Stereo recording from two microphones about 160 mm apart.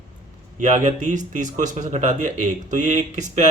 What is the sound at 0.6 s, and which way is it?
Speech, 50° right (ahead or behind).